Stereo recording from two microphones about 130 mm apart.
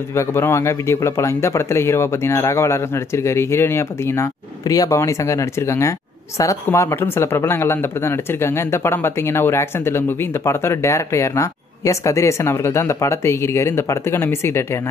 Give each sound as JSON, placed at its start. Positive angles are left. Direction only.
{"t": 0.1, "sound": "speech", "side_deg": 20}